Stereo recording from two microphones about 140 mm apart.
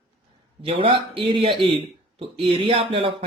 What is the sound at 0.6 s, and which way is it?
A man's voice, 40° right (ahead or behind).